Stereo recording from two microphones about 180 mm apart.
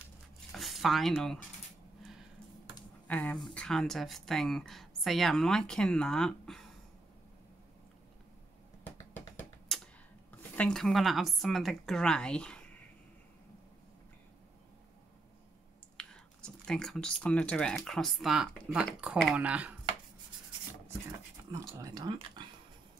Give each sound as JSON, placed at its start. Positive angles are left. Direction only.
{"t": 0.5, "sound": "a sound", "side_deg": 0}
{"t": 3.1, "sound": "speech", "side_deg": 10}
{"t": 8.8, "sound": "a sound", "side_deg": 15}
{"t": 10.3, "sound": "speech", "side_deg": 10}
{"t": 16.0, "sound": "speech", "side_deg": 5}
{"t": 21.7, "sound": "speech", "side_deg": -20}